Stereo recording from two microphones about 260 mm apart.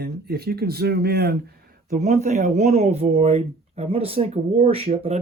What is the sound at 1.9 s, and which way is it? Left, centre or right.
Speech, right.